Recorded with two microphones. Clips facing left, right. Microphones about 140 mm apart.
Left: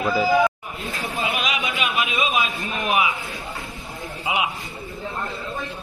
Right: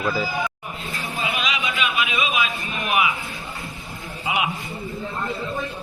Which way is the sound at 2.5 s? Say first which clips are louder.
Left 1 dB; centre (ahead or behind).